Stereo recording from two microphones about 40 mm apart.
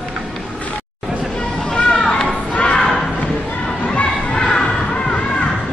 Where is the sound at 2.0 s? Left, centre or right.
Centre.